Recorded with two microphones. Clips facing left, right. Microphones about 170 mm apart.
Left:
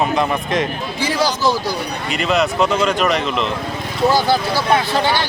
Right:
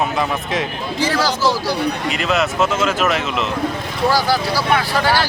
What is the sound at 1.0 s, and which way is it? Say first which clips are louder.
Speech: even; 15° left (ahead or behind).